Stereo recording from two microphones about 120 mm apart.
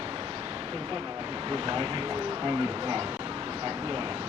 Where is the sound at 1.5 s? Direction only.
45° right (ahead or behind).